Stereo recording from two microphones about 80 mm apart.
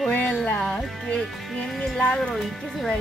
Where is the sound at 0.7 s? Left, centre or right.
Centre.